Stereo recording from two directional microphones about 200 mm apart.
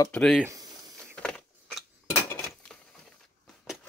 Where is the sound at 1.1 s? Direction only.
5° left (ahead or behind).